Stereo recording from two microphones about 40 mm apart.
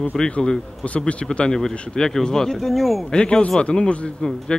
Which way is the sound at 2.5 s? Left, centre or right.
Centre.